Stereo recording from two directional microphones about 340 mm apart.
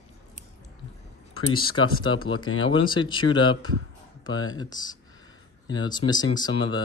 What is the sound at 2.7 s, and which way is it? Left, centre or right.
Speech, centre.